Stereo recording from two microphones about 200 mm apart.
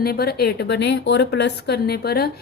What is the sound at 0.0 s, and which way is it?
Speech, 50° left (ahead or behind).